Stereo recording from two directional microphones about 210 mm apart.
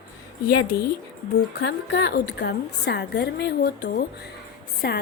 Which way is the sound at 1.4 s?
50° left (ahead or behind).